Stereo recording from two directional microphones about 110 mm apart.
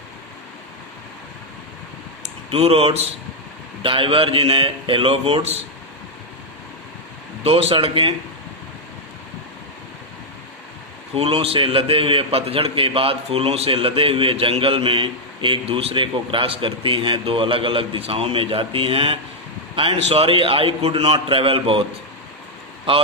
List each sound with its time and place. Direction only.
2.5 s a man's voice: 65° right (ahead or behind)
3.8 s a man's voice: 55° right (ahead or behind)
7.4 s a man's voice: 65° right (ahead or behind)
11.1 s a man's voice: 60° right (ahead or behind)